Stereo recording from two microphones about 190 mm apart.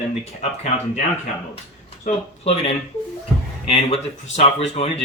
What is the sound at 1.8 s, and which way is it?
Speech, 30° left (ahead or behind).